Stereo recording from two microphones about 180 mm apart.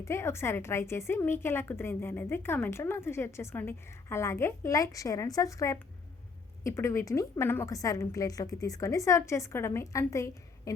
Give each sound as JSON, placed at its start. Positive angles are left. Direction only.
{"t": 0.0, "sound": "a woman's voice", "side_deg": 15}